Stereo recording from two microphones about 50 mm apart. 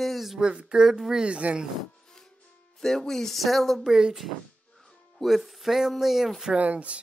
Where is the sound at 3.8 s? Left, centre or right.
Centre.